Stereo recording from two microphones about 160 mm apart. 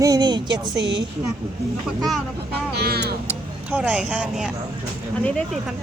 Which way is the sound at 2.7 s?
85° right.